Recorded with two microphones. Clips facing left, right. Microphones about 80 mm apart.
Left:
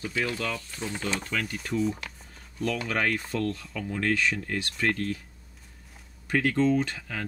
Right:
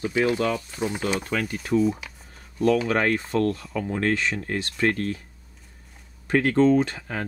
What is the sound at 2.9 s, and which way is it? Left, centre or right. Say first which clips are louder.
Speech: right 5 dB; right.